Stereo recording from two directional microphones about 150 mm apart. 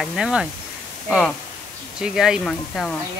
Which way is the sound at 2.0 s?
5° right (ahead or behind).